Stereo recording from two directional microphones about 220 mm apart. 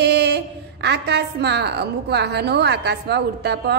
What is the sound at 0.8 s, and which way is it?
A woman's voice, 50° right (ahead or behind).